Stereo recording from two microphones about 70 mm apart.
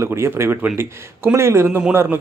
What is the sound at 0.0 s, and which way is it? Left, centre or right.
Speech, right.